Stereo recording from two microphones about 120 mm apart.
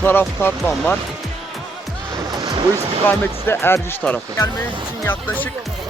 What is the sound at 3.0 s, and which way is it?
Speech, 20° left (ahead or behind).